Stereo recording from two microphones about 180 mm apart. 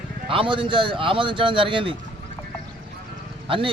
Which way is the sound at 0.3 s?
30° right (ahead or behind).